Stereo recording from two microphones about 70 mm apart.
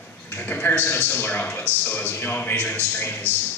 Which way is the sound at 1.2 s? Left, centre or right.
Left.